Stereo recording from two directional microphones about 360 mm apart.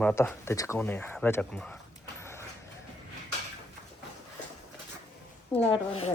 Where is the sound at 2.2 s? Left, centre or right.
Centre.